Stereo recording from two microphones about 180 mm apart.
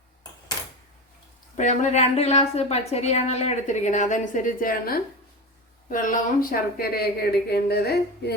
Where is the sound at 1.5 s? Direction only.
40° left (ahead or behind).